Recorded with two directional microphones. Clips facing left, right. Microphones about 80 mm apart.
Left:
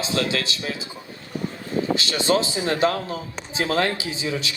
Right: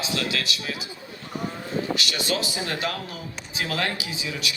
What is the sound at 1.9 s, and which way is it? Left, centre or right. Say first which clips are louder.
A woman's voice: left 6 dB; left.